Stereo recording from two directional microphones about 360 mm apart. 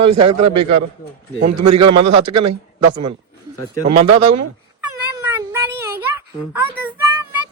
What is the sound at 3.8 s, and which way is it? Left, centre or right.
Speech, centre.